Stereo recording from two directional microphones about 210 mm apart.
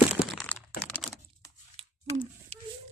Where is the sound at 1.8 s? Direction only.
25° right (ahead or behind).